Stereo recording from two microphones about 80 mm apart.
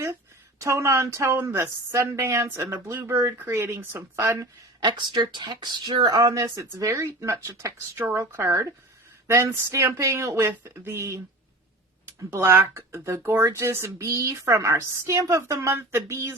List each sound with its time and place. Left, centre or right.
0.6 s a woman's voice: right
2.5 s speech: right
2.8 s a woman's voice: right
3.3 s speech: right
4.1 s a woman's voice: right
4.8 s speech: right
6.3 s a woman's voice: right
9.2 s a woman's voice: right
12.3 s a woman's voice: right